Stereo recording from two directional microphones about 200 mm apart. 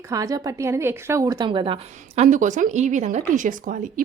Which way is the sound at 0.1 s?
15° right (ahead or behind).